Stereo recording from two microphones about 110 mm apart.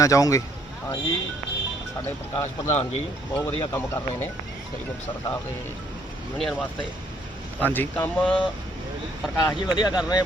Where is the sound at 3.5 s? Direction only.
25° left (ahead or behind).